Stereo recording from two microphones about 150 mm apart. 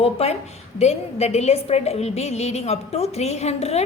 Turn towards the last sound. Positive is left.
turn(degrees=45)  # may be behind; listen again after turning